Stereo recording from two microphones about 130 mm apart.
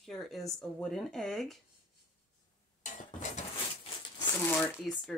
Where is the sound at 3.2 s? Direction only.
60° left (ahead or behind).